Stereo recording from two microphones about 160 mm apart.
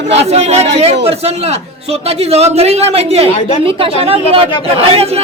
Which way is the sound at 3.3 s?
40° left (ahead or behind).